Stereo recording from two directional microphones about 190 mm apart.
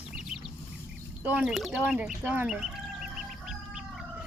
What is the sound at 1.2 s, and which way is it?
Chicken, 5° right (ahead or behind).